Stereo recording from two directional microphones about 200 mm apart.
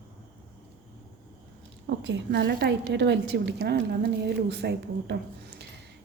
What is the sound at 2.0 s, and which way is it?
A woman's voice, 60° right (ahead or behind).